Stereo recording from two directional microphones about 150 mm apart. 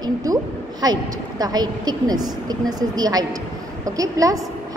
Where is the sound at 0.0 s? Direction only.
25° right (ahead or behind).